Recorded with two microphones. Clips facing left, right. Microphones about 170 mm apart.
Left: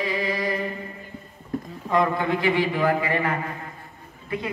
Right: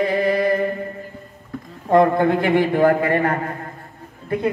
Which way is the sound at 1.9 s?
55° right (ahead or behind).